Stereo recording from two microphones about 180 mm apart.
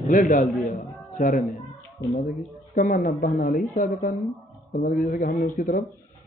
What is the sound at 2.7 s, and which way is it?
Speech, 50° left (ahead or behind).